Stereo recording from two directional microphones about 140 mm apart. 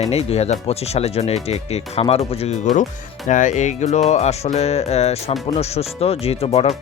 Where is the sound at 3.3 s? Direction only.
65° left (ahead or behind).